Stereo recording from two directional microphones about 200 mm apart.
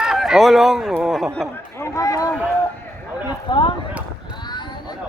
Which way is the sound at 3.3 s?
25° left (ahead or behind).